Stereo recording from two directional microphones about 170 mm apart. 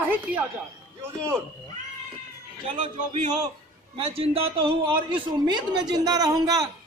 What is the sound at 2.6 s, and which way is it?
A woman's voice, 30° right (ahead or behind).